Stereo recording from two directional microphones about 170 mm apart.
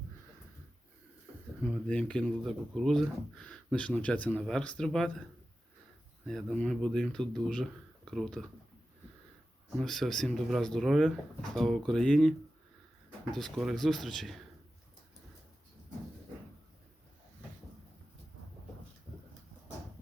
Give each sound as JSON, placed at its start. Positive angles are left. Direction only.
{"t": 1.9, "sound": "speech", "side_deg": 5}
{"t": 6.2, "sound": "speech", "side_deg": 5}
{"t": 9.7, "sound": "speech", "side_deg": 0}
{"t": 13.3, "sound": "speech", "side_deg": 0}